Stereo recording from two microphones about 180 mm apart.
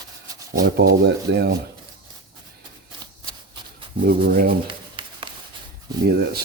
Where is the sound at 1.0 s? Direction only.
65° right (ahead or behind).